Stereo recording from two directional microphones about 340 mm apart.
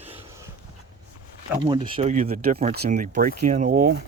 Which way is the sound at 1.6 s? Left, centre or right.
Centre.